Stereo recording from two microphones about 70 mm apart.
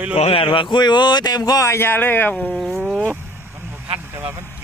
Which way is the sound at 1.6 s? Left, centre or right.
Left.